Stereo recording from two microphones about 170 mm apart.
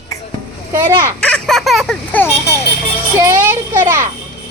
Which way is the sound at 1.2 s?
5° left (ahead or behind).